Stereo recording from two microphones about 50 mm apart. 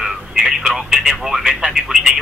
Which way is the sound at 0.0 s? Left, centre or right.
Centre.